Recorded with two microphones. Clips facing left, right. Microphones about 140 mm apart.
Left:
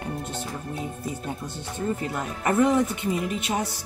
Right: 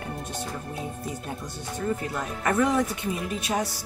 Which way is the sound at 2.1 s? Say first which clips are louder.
Left 3 dB; 25° left (ahead or behind).